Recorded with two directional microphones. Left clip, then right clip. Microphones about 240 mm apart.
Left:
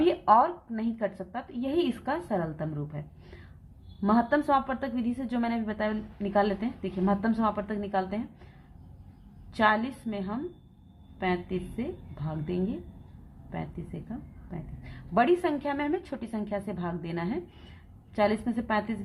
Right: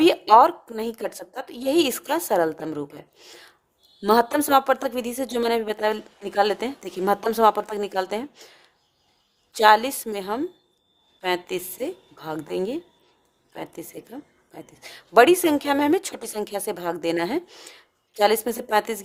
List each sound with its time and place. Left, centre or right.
0.0 s a woman's voice: right
4.0 s a woman's voice: right
9.5 s a woman's voice: right
15.1 s a woman's voice: right